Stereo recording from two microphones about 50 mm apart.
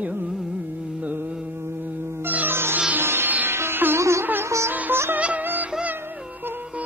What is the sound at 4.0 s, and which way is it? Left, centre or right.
Music, right.